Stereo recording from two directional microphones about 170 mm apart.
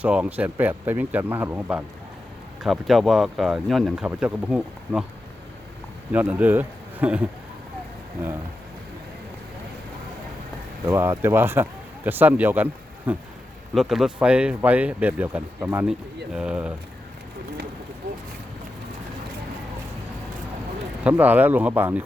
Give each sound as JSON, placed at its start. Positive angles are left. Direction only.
{"t": 0.0, "sound": "speech", "side_deg": -10}
{"t": 6.1, "sound": "speech", "side_deg": -10}
{"t": 10.8, "sound": "speech", "side_deg": -15}
{"t": 21.0, "sound": "speech", "side_deg": -10}